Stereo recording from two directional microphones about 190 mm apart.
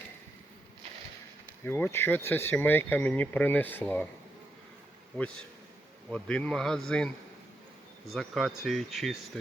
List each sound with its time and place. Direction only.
1.6 s speech: 10° left (ahead or behind)
6.1 s speech: 5° left (ahead or behind)
8.1 s speech: centre (ahead or behind)